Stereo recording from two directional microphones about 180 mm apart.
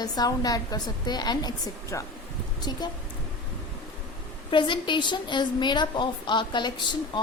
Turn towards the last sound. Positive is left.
turn(degrees=25)  # may be behind; listen again after turning